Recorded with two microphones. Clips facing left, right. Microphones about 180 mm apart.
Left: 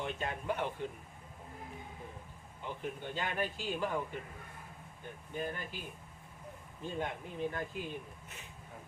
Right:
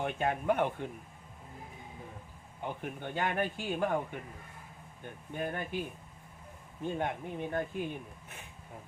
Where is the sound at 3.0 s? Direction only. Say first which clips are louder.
Right 5 dB; 55° right (ahead or behind).